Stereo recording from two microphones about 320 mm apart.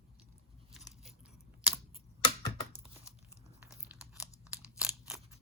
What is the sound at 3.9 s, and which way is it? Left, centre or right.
Chewing, centre.